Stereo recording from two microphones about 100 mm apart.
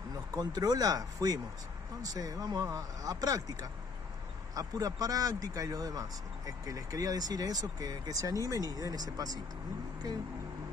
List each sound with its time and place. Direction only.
0.3 s speech: 40° right (ahead or behind)
4.6 s speech: 40° right (ahead or behind)